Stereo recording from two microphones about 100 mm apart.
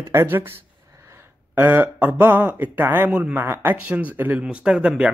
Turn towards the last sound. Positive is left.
turn(degrees=-10)  # may be behind; listen again after turning